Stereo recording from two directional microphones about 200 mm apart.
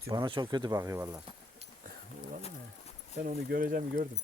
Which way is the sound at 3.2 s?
45° right (ahead or behind).